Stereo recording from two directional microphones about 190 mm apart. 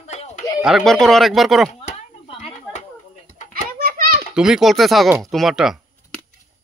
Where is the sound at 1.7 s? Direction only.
35° left (ahead or behind).